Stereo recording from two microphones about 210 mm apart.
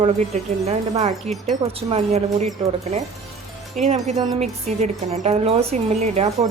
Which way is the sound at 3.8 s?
30° right (ahead or behind).